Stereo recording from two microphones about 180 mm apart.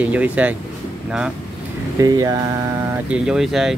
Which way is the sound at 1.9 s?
20° right (ahead or behind).